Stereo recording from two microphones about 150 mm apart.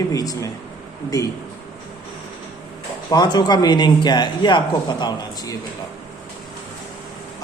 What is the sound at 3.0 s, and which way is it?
A man's voice, 25° left (ahead or behind).